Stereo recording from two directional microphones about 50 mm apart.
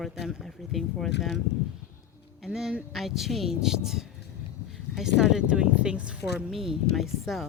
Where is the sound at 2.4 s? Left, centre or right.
Centre.